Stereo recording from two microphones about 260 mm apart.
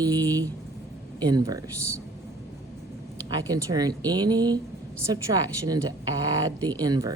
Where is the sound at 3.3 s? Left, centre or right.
Centre.